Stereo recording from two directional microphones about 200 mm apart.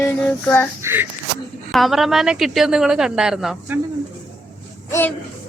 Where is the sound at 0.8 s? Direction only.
10° right (ahead or behind).